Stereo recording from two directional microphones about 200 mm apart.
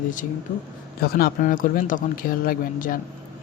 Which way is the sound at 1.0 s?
50° left (ahead or behind).